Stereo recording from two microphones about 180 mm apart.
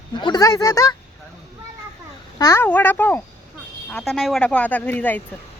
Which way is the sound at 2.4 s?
15° left (ahead or behind).